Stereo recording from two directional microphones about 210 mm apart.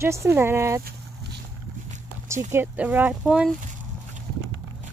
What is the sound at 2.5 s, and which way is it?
Speech, 10° right (ahead or behind).